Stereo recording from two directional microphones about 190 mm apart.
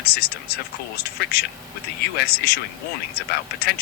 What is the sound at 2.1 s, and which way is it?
Speech, 55° left (ahead or behind).